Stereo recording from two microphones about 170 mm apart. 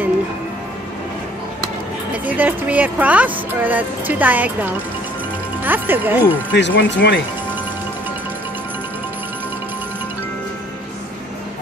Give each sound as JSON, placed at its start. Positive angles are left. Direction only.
{"t": 2.2, "sound": "speech", "side_deg": -10}
{"t": 6.5, "sound": "speech", "side_deg": 90}